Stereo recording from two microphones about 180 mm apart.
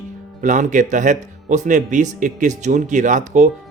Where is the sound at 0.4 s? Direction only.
45° right (ahead or behind).